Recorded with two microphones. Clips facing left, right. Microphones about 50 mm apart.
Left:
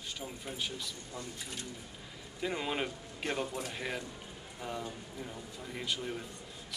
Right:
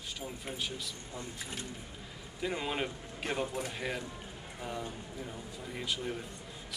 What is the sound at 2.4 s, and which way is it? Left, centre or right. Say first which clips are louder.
A man's voice: even; centre.